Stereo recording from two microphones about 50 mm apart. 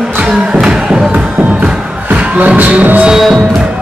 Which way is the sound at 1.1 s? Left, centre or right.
Right.